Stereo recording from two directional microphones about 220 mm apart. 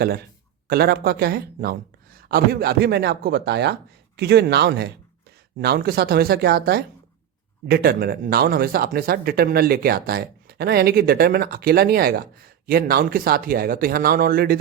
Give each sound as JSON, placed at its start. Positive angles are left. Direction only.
{"t": 0.7, "sound": "speech", "side_deg": -45}